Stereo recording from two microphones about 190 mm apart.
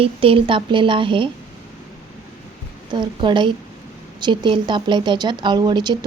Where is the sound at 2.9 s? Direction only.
25° right (ahead or behind).